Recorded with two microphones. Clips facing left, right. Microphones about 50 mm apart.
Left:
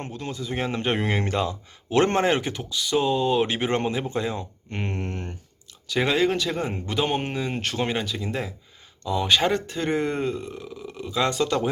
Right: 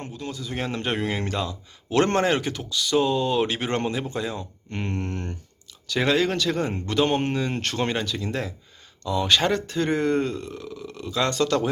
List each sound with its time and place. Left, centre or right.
0.0 s speech: left; by 11.7 s centre